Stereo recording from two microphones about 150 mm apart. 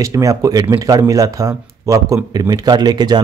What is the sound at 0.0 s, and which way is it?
A man's voice, 20° right (ahead or behind).